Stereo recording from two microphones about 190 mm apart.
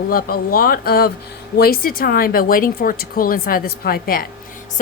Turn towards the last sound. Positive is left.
turn(degrees=50)  # may be behind; listen again after turning